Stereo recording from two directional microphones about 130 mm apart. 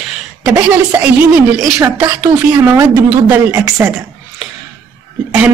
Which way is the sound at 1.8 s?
20° right (ahead or behind).